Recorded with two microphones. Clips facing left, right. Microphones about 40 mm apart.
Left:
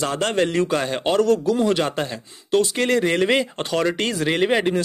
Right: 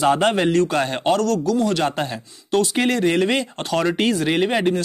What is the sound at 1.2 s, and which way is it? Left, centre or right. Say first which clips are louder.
Speech: left 1 dB; left.